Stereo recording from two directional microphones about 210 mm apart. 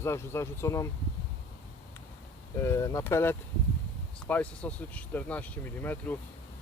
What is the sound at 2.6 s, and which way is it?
Speech, 15° left (ahead or behind).